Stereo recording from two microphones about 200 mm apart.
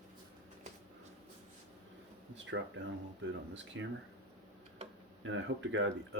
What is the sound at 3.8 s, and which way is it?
Speech, 70° right (ahead or behind).